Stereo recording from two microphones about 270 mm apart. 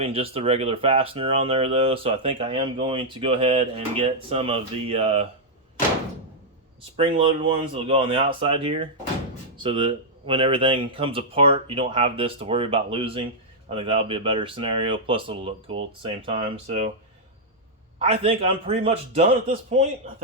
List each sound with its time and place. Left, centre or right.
0.0 s speech: right
6.9 s speech: right
18.0 s speech: right